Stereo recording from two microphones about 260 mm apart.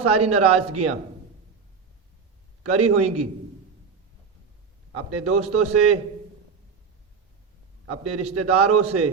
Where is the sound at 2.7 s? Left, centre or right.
Right.